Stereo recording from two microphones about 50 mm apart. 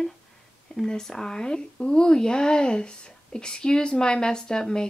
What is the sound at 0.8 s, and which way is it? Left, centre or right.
Speech, centre.